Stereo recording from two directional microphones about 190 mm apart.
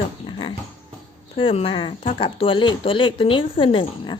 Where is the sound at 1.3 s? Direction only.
30° left (ahead or behind).